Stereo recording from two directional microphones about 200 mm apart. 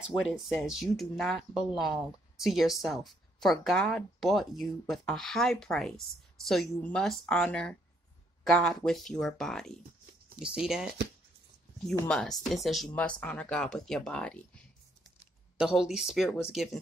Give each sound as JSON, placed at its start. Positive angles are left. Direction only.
{"t": 0.3, "sound": "speech", "side_deg": 0}